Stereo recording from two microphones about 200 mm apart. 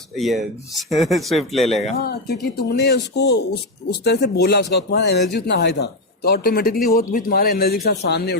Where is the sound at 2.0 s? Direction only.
50° left (ahead or behind).